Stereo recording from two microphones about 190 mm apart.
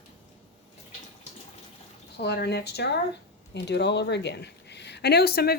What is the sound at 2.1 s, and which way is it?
A woman's voice, 60° left (ahead or behind).